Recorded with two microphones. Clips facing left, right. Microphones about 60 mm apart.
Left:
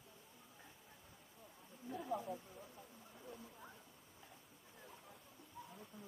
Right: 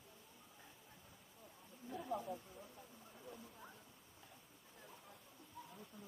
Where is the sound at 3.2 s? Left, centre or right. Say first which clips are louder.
Left 1 dB; centre.